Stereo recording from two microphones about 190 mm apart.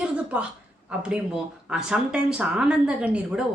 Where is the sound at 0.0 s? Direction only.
5° right (ahead or behind).